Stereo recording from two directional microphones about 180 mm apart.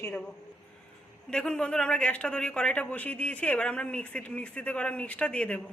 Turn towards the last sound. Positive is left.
turn(degrees=5)  # may be behind; listen again after turning